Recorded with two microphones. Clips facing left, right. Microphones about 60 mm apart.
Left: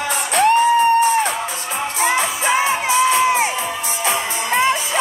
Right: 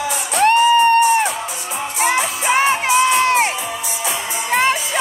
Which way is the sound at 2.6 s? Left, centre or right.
Right.